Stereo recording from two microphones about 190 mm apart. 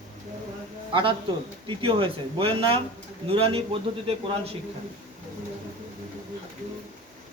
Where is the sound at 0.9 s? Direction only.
25° right (ahead or behind).